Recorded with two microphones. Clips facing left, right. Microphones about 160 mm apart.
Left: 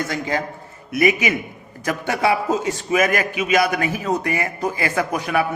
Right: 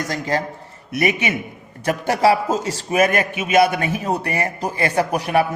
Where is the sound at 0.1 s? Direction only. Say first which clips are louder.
Right 1 dB; 35° right (ahead or behind).